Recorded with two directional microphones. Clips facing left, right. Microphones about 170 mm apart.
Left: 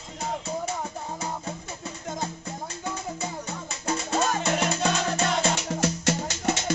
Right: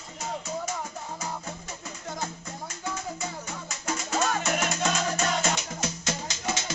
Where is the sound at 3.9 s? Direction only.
30° left (ahead or behind).